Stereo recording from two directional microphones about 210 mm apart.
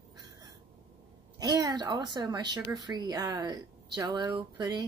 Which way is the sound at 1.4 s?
20° right (ahead or behind).